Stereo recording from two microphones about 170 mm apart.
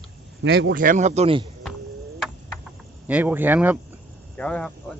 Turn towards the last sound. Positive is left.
turn(degrees=5)  # may be behind; listen again after turning